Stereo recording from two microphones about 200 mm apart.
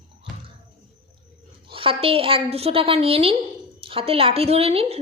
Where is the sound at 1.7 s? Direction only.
25° right (ahead or behind).